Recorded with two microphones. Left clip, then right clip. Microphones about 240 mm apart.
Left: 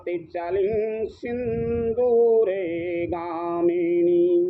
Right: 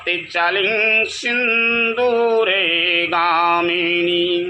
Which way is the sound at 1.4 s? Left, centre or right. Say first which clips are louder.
Right 10 dB; right.